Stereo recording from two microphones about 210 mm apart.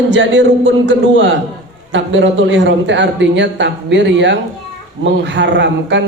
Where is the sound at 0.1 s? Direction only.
60° right (ahead or behind).